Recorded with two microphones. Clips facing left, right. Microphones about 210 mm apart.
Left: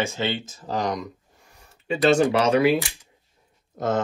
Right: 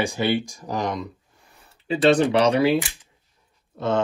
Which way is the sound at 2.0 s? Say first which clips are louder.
Right 1 dB; 30° right (ahead or behind).